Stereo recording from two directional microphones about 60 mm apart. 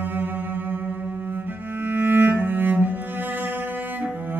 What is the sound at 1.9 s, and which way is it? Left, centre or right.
Cello, right.